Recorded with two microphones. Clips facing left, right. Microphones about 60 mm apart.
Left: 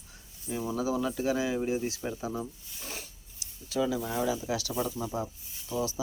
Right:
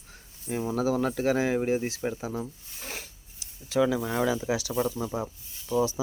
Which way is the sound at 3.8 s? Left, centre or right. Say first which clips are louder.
Right 5 dB; right.